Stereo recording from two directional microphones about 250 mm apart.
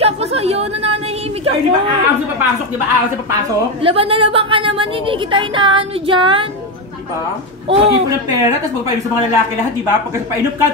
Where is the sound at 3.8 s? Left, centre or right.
Right.